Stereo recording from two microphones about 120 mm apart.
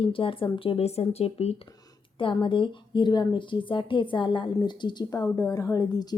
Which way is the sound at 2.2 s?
45° left (ahead or behind).